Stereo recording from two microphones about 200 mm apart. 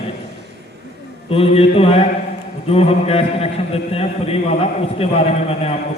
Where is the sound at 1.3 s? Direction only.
30° left (ahead or behind).